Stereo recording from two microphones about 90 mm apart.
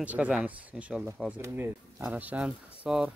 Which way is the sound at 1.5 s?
20° right (ahead or behind).